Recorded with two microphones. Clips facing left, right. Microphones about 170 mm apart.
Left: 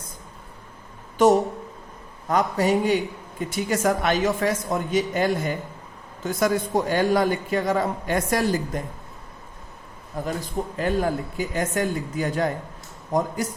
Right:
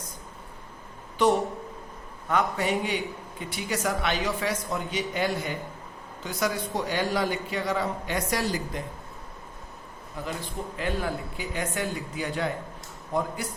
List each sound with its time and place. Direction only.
1.2 s a man's voice: 45° left (ahead or behind)
10.2 s a man's voice: 45° left (ahead or behind)